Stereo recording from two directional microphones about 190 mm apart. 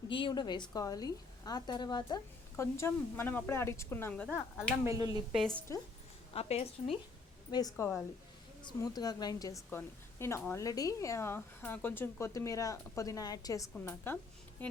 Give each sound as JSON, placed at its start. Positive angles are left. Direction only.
{"t": 0.1, "sound": "a woman's voice", "side_deg": 25}
{"t": 4.9, "sound": "speech", "side_deg": -20}
{"t": 5.5, "sound": "speech", "side_deg": 5}
{"t": 6.3, "sound": "a woman's voice", "side_deg": 35}
{"t": 7.5, "sound": "a woman's voice", "side_deg": 20}
{"t": 9.6, "sound": "speech", "side_deg": 10}